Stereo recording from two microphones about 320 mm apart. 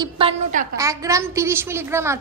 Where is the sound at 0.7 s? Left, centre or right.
Centre.